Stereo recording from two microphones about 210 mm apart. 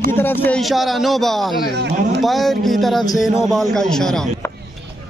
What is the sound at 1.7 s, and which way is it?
Speech, 55° right (ahead or behind).